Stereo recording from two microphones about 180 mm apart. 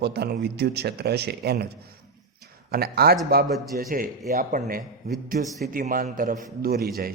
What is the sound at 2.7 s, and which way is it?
A man's voice, 60° right (ahead or behind).